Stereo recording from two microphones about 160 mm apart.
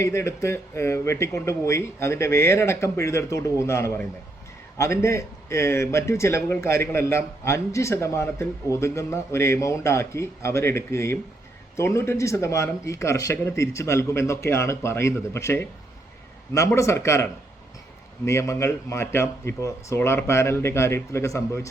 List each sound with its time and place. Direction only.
0.0 s a man's voice: 15° left (ahead or behind)